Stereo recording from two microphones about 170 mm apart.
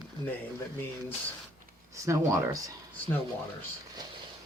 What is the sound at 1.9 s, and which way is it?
Speech, 20° right (ahead or behind).